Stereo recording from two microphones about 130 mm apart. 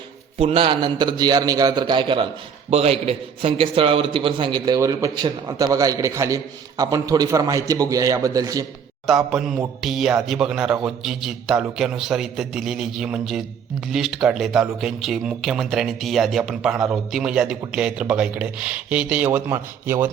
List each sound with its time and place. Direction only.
0.3 s a man's voice: 45° right (ahead or behind)
2.6 s a man's voice: 50° right (ahead or behind); by 8.6 s 30° right (ahead or behind)
9.0 s speech: centre (ahead or behind); by 20.1 s 20° right (ahead or behind)